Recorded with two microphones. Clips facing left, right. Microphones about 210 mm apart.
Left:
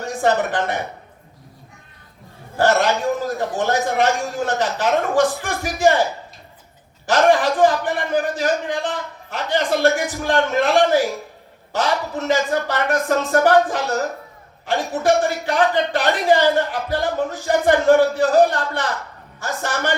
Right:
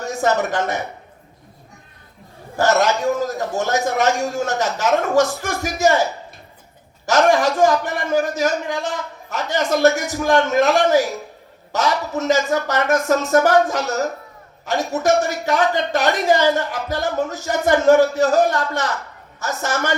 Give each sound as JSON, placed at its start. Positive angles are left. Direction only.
{"t": 0.2, "sound": "speech", "side_deg": -45}
{"t": 2.6, "sound": "speech", "side_deg": -45}
{"t": 7.0, "sound": "speech", "side_deg": -45}